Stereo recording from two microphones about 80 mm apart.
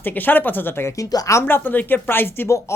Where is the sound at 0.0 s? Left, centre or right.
Left.